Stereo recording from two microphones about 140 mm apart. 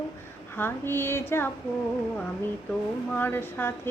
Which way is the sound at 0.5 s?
15° left (ahead or behind).